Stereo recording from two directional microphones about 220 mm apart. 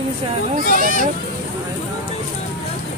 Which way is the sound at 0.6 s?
40° right (ahead or behind).